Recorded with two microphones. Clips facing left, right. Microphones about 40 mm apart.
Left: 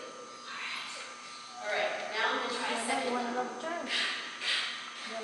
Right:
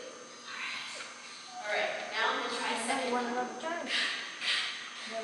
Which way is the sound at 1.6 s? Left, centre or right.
Centre.